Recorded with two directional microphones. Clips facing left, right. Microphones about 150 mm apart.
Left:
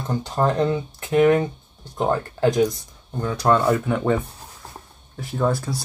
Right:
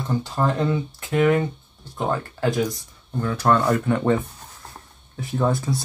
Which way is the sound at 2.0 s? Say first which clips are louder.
Left 3 dB; 40° left (ahead or behind).